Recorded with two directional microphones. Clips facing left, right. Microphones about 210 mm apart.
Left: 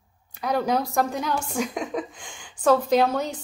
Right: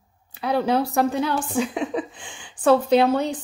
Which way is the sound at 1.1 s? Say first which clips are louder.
Right 4 dB; 10° left (ahead or behind).